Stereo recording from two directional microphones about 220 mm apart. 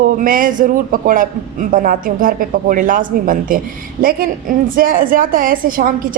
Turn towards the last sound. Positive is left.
turn(degrees=-40)  # may be behind; listen again after turning